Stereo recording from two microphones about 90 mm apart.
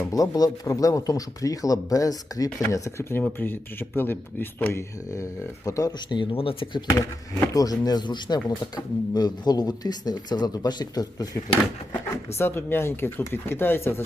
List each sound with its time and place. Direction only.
0.1 s speech: 45° left (ahead or behind); by 4.8 s 20° left (ahead or behind)
5.1 s speech: 35° left (ahead or behind)
6.1 s speech: 75° left (ahead or behind)
7.5 s speech: 45° left (ahead or behind)
12.1 s speech: 25° left (ahead or behind)